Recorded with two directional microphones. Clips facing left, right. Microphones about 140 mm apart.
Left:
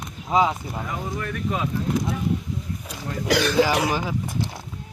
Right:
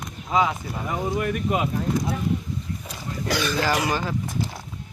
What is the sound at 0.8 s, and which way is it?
Speech, 20° right (ahead or behind).